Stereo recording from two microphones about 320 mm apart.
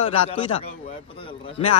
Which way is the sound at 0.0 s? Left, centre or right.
Centre.